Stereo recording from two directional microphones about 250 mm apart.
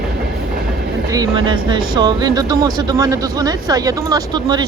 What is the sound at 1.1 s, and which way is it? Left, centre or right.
Speech, centre.